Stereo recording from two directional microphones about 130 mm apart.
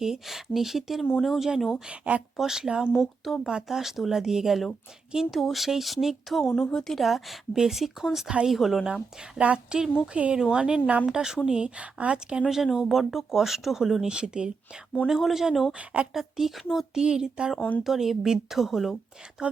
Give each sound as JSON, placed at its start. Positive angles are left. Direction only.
{"t": 0.0, "sound": "speech", "side_deg": -5}